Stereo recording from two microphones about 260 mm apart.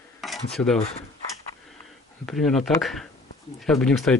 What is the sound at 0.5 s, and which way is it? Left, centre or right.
Speech, centre.